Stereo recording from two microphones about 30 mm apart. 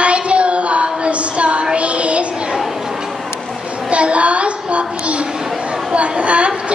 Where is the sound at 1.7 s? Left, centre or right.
Right.